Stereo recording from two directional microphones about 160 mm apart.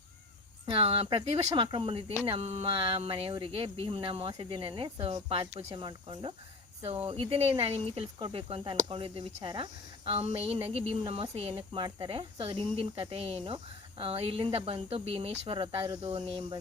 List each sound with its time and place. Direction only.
0.6 s speech: 35° right (ahead or behind)